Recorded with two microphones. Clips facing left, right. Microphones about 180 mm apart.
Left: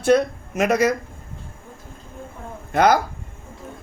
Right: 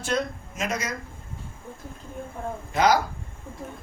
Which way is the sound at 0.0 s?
65° left (ahead or behind).